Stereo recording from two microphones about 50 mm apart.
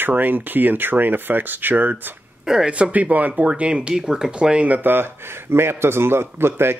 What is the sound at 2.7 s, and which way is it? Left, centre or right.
Speech, right.